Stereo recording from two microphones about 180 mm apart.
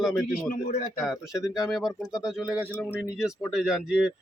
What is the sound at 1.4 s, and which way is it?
Speech, 5° right (ahead or behind).